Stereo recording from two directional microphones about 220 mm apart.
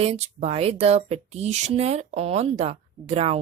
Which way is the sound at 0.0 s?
30° right (ahead or behind).